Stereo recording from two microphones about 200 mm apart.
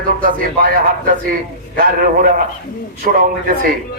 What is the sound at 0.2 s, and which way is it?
A man's voice, 45° right (ahead or behind).